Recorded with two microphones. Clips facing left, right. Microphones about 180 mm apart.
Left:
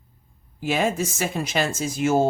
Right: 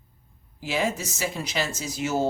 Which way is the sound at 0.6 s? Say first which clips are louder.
Left 4 dB; 50° left (ahead or behind).